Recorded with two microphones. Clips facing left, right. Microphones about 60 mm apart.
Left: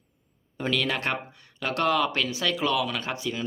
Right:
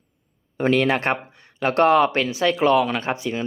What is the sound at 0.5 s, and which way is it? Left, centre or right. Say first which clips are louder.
Speech: right 8 dB; right.